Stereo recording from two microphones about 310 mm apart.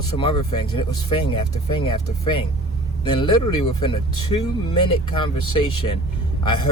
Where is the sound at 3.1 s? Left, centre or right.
Centre.